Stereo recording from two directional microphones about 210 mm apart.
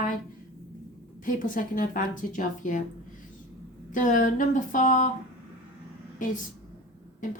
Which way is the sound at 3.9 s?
40° left (ahead or behind).